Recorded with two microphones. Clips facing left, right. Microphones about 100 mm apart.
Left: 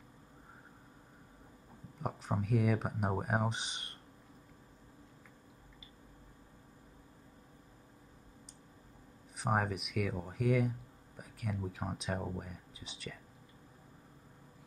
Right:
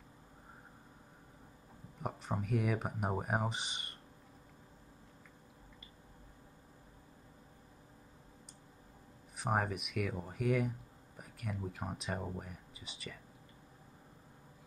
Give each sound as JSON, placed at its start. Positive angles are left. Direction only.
{"t": 2.0, "sound": "speech", "side_deg": 0}
{"t": 9.4, "sound": "speech", "side_deg": 0}